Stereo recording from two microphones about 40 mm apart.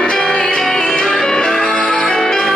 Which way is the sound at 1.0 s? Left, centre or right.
Centre.